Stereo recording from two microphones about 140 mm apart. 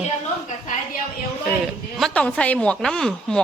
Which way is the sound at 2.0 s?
5° left (ahead or behind).